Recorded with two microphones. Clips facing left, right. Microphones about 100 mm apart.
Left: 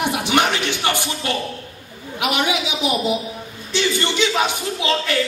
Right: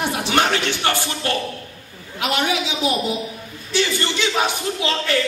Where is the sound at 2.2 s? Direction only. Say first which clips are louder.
Even; 15° left (ahead or behind).